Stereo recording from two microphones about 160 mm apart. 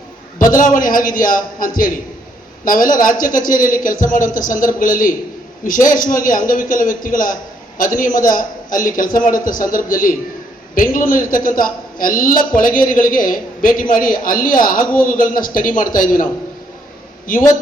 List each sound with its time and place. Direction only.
0.5 s a man's voice: 55° left (ahead or behind)
17.3 s a man's voice: 60° left (ahead or behind)